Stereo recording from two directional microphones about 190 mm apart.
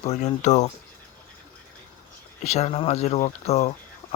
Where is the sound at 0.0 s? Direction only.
35° left (ahead or behind).